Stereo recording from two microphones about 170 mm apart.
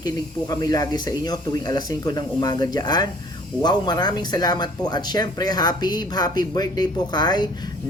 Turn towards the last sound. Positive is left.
turn(degrees=25)  # may be behind; listen again after turning